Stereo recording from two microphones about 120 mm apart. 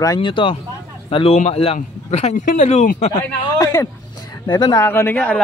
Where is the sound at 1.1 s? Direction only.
55° left (ahead or behind).